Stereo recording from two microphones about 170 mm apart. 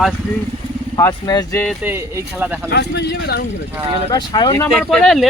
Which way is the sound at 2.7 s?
75° left (ahead or behind).